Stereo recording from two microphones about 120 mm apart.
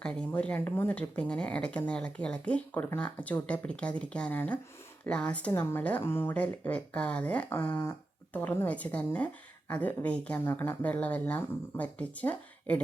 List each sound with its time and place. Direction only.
0.0 s speech: 10° left (ahead or behind)